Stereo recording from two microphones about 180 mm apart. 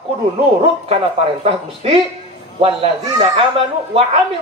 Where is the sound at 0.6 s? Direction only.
35° right (ahead or behind).